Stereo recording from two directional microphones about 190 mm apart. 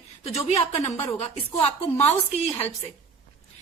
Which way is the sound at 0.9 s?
15° left (ahead or behind).